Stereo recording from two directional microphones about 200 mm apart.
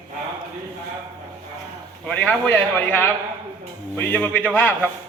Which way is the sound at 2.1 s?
5° left (ahead or behind).